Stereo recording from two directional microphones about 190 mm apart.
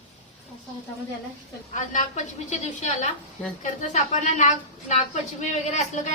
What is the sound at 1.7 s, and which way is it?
A woman's voice, 40° left (ahead or behind).